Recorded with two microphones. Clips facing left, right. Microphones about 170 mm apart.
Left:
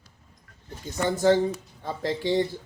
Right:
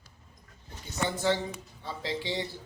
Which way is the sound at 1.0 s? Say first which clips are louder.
Left 8 dB; 45° left (ahead or behind).